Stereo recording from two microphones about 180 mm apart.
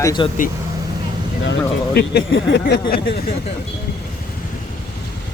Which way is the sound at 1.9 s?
70° left (ahead or behind).